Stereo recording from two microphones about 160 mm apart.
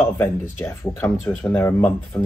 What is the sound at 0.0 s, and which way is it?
Speech, 15° left (ahead or behind).